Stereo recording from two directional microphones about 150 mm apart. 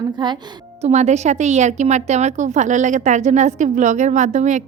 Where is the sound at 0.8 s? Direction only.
50° right (ahead or behind).